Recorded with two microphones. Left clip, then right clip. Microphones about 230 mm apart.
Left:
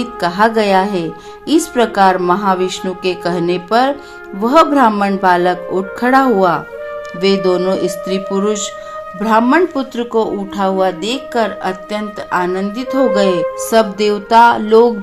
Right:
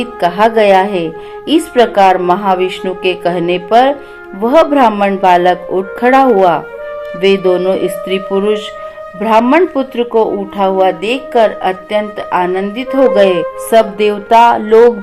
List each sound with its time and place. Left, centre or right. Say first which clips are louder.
0.0 s a woman's voice: right 3 dB; left